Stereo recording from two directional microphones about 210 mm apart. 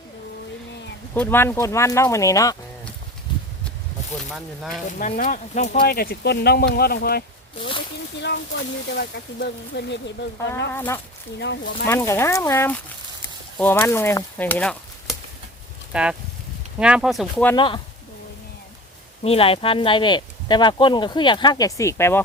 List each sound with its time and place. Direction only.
1.1 s speech: 10° left (ahead or behind)
4.4 s speech: centre (ahead or behind)
4.9 s speech: 40° left (ahead or behind)
9.0 s speech: 50° left (ahead or behind)
10.8 s speech: 10° left (ahead or behind)
11.3 s speech: 60° left (ahead or behind)
11.9 s speech: 15° left (ahead or behind)
17.5 s speech: 20° left (ahead or behind)
19.2 s speech: 25° left (ahead or behind); by 22.2 s 10° left (ahead or behind)